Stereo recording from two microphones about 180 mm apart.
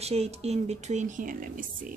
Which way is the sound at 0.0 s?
35° right (ahead or behind).